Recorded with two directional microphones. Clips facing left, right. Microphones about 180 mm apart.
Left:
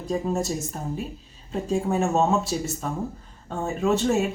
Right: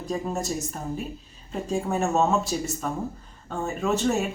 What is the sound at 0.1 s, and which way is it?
Speech, centre (ahead or behind).